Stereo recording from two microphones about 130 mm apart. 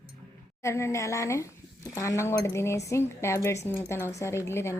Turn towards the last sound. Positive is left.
turn(degrees=20)  # may be behind; listen again after turning